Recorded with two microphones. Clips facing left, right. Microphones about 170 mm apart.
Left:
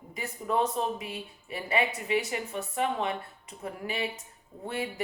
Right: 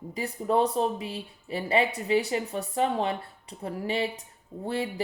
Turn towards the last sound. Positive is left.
turn(degrees=-30)  # may be behind; listen again after turning